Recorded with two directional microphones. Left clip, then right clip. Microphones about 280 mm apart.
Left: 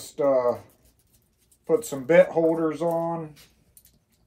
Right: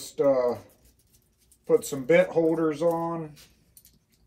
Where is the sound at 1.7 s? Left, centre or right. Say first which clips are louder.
Even; centre.